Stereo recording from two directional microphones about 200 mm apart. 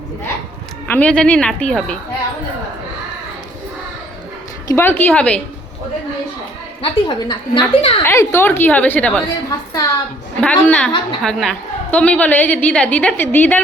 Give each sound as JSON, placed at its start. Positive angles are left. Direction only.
{"t": 0.9, "sound": "a woman's voice", "side_deg": 5}
{"t": 4.7, "sound": "a woman's voice", "side_deg": 10}
{"t": 6.8, "sound": "a woman's voice", "side_deg": 20}
{"t": 8.0, "sound": "a woman's voice", "side_deg": 15}
{"t": 9.5, "sound": "a woman's voice", "side_deg": 15}
{"t": 10.4, "sound": "a woman's voice", "side_deg": 5}